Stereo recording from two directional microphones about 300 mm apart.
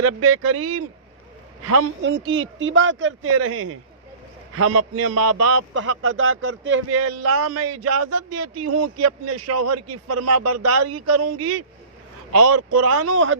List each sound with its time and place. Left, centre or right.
0.0 s speech: right
7.0 s speech: right